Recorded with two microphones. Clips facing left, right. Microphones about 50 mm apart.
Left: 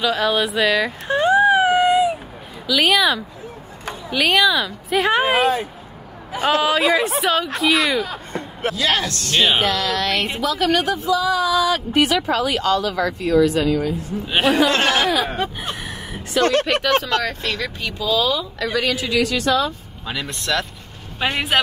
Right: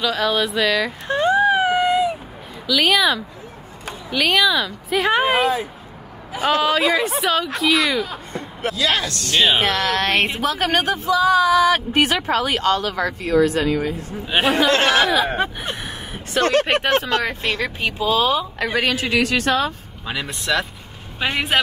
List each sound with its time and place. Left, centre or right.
0.0 s a woman's voice: centre
6.6 s a woman's voice: centre
8.3 s speech: left
9.2 s speech: right
14.8 s speech: right
20.1 s a man's voice: centre